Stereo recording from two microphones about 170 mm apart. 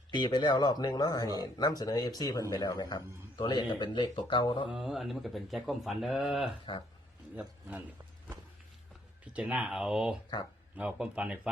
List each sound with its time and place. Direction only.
0.1 s speech: 25° left (ahead or behind)
4.7 s speech: centre (ahead or behind)
9.3 s speech: 5° right (ahead or behind)